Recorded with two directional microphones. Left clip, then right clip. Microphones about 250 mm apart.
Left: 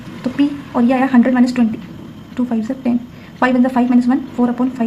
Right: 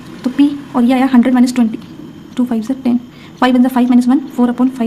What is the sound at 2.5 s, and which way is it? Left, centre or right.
A woman's voice, right.